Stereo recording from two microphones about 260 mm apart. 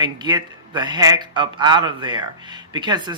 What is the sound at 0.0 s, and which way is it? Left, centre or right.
A man's voice, centre.